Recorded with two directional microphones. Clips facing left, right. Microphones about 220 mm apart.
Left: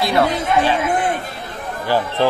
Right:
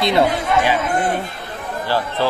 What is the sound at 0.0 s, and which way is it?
Speech, 20° right (ahead or behind).